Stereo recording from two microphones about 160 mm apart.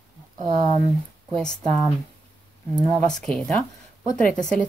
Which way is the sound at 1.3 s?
5° left (ahead or behind).